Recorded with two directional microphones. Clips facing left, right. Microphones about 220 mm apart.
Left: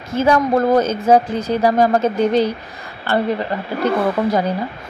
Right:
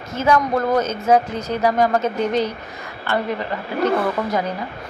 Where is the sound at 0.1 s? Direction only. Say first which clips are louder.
Left 3 dB; 30° left (ahead or behind).